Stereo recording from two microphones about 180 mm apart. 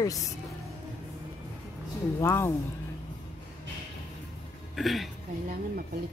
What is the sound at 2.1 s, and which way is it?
Speech, 15° left (ahead or behind).